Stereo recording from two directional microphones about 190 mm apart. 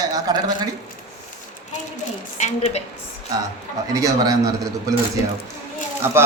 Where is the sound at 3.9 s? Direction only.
20° right (ahead or behind).